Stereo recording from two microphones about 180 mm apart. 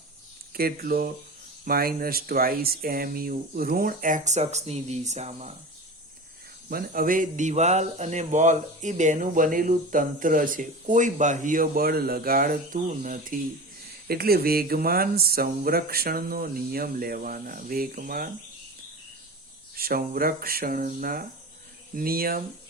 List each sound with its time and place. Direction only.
0.5 s speech: 55° right (ahead or behind); by 5.5 s 40° right (ahead or behind)
6.7 s speech: 55° right (ahead or behind)
19.7 s speech: 55° right (ahead or behind)